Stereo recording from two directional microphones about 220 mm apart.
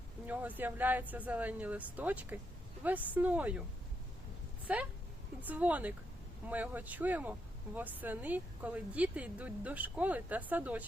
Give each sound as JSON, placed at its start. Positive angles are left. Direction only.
{"t": 0.3, "sound": "speech", "side_deg": -5}
{"t": 4.6, "sound": "speech", "side_deg": -5}